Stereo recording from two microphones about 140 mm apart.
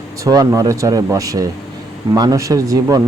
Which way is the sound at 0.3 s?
25° right (ahead or behind).